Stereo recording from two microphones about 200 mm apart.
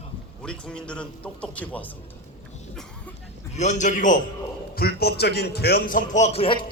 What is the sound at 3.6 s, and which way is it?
Speech, 35° left (ahead or behind).